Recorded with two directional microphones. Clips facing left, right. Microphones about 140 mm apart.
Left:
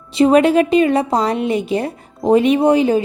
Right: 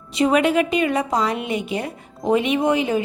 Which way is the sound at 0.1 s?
30° left (ahead or behind).